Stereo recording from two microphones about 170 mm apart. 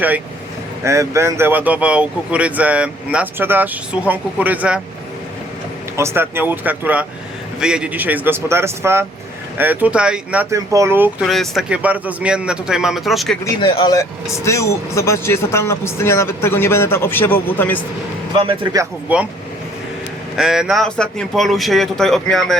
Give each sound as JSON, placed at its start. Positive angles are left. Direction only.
{"t": 0.9, "sound": "speech", "side_deg": -15}
{"t": 6.0, "sound": "speech", "side_deg": -15}
{"t": 10.5, "sound": "speech", "side_deg": -20}
{"t": 11.3, "sound": "speech", "side_deg": 0}
{"t": 13.6, "sound": "speech", "side_deg": 30}
{"t": 18.3, "sound": "speech", "side_deg": -30}
{"t": 18.8, "sound": "speech", "side_deg": -10}
{"t": 20.3, "sound": "speech", "side_deg": -5}